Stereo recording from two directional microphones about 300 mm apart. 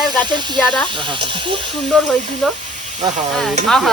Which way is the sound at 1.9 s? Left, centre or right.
Centre.